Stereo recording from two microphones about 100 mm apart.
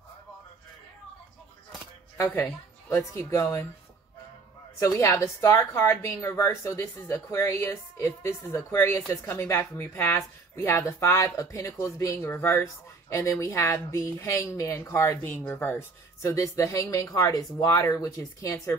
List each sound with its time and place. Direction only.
3.1 s a woman's voice: 30° left (ahead or behind)
4.7 s a woman's voice: 30° left (ahead or behind)